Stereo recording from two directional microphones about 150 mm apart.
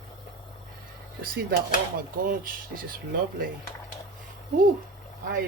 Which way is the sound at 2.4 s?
75° right (ahead or behind).